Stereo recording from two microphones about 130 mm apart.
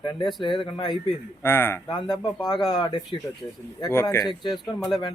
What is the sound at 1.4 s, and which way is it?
Speech, 20° left (ahead or behind).